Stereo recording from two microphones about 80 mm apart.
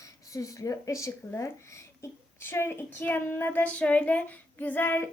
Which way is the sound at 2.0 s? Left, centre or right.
Left.